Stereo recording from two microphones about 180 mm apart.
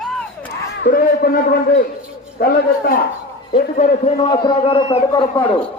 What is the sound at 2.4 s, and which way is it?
Speech, 55° left (ahead or behind).